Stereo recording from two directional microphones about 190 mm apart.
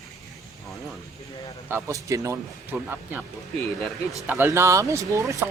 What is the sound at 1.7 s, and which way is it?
Speech, 15° right (ahead or behind).